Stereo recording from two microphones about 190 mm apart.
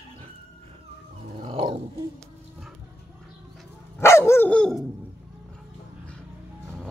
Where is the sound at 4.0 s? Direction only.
15° left (ahead or behind).